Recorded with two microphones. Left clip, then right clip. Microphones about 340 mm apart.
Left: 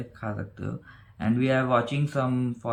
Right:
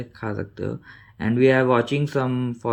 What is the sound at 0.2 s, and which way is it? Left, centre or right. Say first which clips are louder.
Speech: right 7 dB; centre.